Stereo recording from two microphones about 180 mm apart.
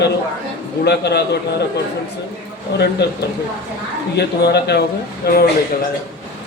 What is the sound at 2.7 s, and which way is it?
Speech, 65° left (ahead or behind).